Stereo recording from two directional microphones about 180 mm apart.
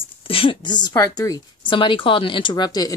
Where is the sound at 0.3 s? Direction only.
30° left (ahead or behind).